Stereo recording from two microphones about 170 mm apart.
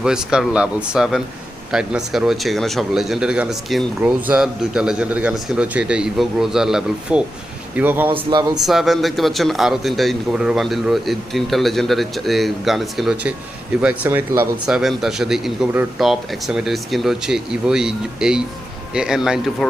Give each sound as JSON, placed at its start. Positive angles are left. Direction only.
{"t": 0.0, "sound": "speech", "side_deg": -5}
{"t": 8.1, "sound": "speech", "side_deg": -25}
{"t": 8.6, "sound": "speech", "side_deg": 0}